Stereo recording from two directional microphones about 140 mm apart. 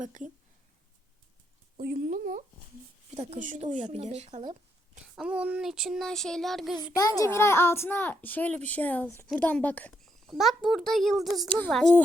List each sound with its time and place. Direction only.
0.0 s speech: 65° right (ahead or behind)
1.8 s speech: 85° right
3.3 s speech: 65° right (ahead or behind)
5.0 s a sound: 5° right (ahead or behind)
6.9 s a child's voice: 25° left (ahead or behind)
10.1 s a sound: centre (ahead or behind)
11.4 s a child's voice: 10° left (ahead or behind)